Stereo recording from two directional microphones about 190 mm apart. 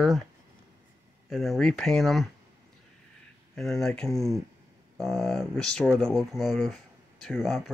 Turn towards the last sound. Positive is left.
turn(degrees=0)  # may be behind; listen again after turning